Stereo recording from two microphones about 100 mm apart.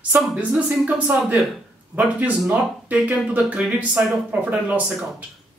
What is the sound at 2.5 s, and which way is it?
A woman's voice, 15° right (ahead or behind).